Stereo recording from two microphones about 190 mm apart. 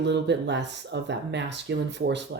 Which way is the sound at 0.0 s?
65° right (ahead or behind).